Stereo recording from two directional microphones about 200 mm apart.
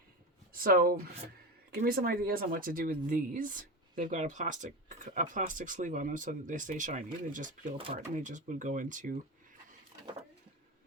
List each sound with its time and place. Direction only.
0.5 s speech: 45° right (ahead or behind)